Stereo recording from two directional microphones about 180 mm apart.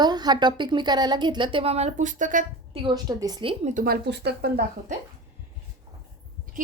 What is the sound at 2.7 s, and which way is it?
A woman's voice, 25° right (ahead or behind).